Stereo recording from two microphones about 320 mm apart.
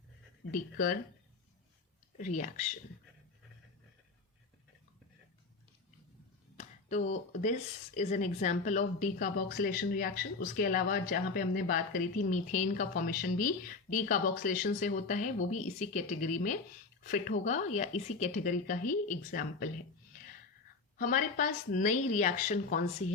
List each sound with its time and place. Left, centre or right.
0.5 s speech: left
2.1 s speech: left
6.6 s speech: left
21.0 s speech: left